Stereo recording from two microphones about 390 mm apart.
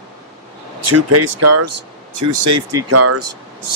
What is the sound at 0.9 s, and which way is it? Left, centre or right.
Speech, right.